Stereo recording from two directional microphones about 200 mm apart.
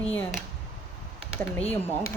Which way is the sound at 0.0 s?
10° left (ahead or behind).